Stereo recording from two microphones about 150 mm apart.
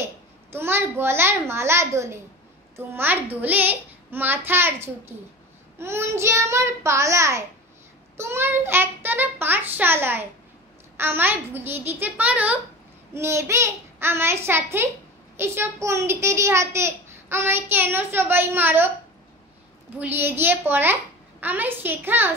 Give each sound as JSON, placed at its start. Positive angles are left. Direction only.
{"t": 0.0, "sound": "a child's voice", "side_deg": -15}
{"t": 20.0, "sound": "a child's voice", "side_deg": -15}